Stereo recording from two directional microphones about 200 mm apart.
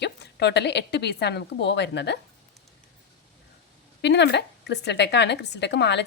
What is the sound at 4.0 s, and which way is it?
Speech, 60° left (ahead or behind).